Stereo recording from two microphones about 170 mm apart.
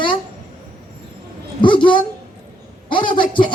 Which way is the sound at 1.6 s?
30° left (ahead or behind).